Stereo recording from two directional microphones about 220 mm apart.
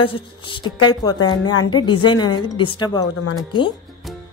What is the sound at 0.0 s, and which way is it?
Speech, 20° left (ahead or behind).